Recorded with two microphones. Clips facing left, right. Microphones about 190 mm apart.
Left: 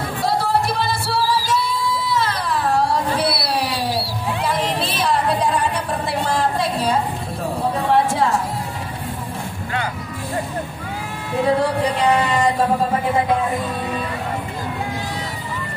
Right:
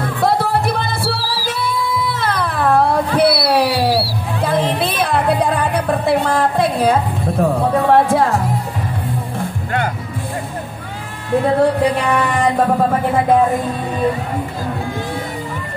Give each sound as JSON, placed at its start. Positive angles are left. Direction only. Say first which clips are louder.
{"t": 0.0, "sound": "music", "louder": "right 4 dB", "side_deg": -55}
{"t": 1.1, "sound": "music", "louder": "left 5 dB", "side_deg": 55}
{"t": 1.5, "sound": "music", "louder": "right 1 dB", "side_deg": -55}
{"t": 11.4, "sound": "music", "louder": "right 3 dB", "side_deg": -55}